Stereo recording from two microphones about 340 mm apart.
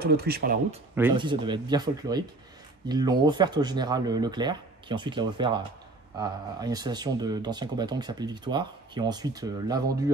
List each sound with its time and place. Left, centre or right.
0.0 s speech: right
0.9 s speech: centre